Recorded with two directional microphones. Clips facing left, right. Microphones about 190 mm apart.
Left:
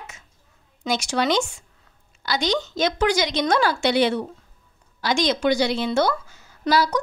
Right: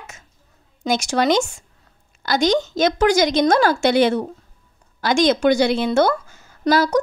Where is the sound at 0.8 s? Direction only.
45° right (ahead or behind).